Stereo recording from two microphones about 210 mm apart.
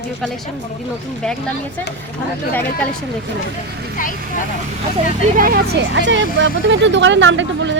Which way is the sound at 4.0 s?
40° left (ahead or behind).